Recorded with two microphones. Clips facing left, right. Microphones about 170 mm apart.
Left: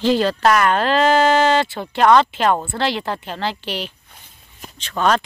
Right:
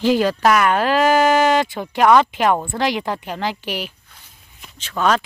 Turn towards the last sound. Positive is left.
turn(degrees=-5)  # may be behind; listen again after turning